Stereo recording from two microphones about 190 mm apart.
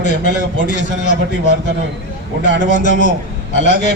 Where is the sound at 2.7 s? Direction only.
40° left (ahead or behind).